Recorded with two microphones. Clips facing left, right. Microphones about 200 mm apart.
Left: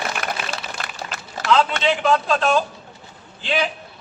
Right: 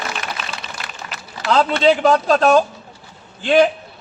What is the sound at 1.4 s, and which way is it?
A man's voice, 40° right (ahead or behind).